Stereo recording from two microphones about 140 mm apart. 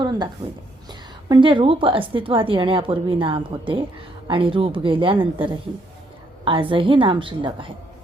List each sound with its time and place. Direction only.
0.0 s a woman's voice: 30° right (ahead or behind)